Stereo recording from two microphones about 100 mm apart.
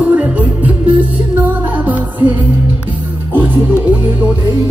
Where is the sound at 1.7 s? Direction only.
15° right (ahead or behind).